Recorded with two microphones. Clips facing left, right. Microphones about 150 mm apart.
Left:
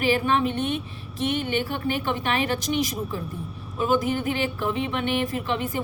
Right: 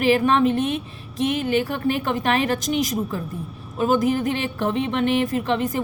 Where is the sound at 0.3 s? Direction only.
35° right (ahead or behind).